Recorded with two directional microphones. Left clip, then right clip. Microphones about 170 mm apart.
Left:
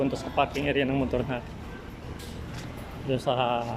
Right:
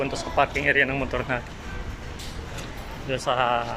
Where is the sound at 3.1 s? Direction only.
20° left (ahead or behind).